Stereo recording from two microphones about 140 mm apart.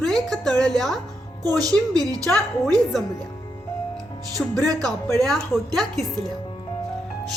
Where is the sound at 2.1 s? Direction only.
5° left (ahead or behind).